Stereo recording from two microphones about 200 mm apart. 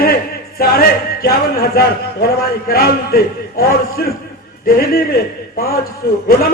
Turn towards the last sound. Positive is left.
turn(degrees=50)  # may be behind; listen again after turning